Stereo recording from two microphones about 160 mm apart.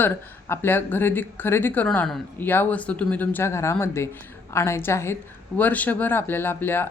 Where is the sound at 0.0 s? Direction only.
15° left (ahead or behind).